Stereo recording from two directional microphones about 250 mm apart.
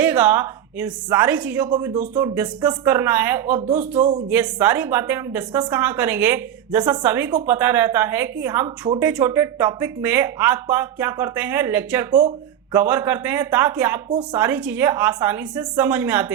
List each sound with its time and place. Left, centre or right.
0.0 s a woman's voice: centre
1.7 s a woman's voice: centre
2.1 s a woman's voice: centre